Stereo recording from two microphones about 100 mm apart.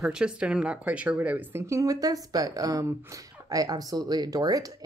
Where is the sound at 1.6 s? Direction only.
35° right (ahead or behind).